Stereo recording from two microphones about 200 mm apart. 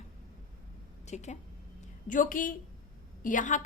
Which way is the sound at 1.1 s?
35° left (ahead or behind).